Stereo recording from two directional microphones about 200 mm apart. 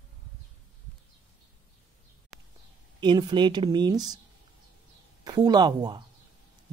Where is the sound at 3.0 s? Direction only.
20° right (ahead or behind).